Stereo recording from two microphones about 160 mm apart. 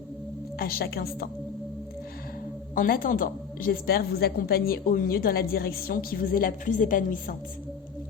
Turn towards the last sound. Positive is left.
turn(degrees=60)  # may be behind; listen again after turning